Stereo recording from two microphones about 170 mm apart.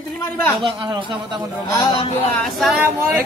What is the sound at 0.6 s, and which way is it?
Speech, 30° right (ahead or behind).